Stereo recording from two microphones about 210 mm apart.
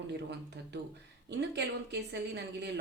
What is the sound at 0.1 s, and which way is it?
Speech, 55° right (ahead or behind).